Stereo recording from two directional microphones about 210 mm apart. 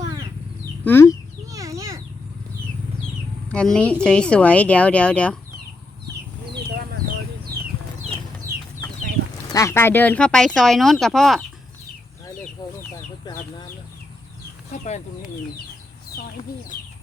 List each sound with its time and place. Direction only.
0.9 s speech: 10° left (ahead or behind)
1.5 s a sound: 15° right (ahead or behind)
3.5 s speech: 5° left (ahead or behind)
6.6 s a sound: 50° right (ahead or behind)
9.5 s speech: 15° left (ahead or behind)
12.6 s speech: 20° left (ahead or behind)
14.7 s speech: 35° left (ahead or behind)